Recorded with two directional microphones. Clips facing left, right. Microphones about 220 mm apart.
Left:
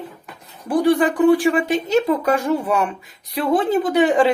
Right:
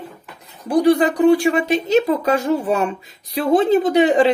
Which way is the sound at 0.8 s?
20° right (ahead or behind).